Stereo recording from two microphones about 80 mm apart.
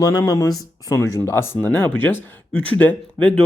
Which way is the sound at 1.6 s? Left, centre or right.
Left.